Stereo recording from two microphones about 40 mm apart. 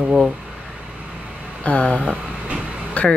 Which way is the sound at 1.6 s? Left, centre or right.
Left.